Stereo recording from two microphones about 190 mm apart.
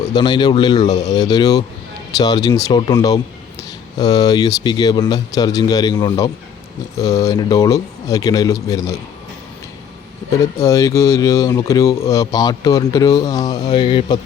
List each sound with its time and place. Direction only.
0.1 s speech: 25° left (ahead or behind)
10.3 s speech: 15° left (ahead or behind)